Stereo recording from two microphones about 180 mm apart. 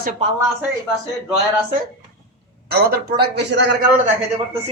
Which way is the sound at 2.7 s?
60° right (ahead or behind).